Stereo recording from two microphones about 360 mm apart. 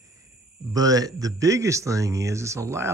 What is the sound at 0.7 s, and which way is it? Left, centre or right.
Speech, centre.